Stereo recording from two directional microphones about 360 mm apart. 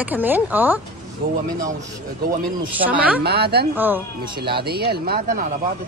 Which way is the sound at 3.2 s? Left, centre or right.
Right.